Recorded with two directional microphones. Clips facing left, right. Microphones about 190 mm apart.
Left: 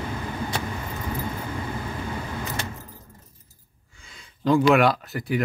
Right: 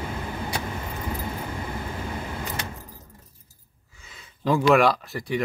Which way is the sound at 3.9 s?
5° right (ahead or behind).